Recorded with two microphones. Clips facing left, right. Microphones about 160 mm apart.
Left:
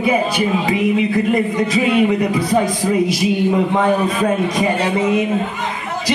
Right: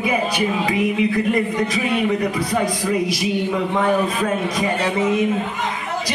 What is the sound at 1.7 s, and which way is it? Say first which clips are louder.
Speech: left 5 dB; 20° left (ahead or behind).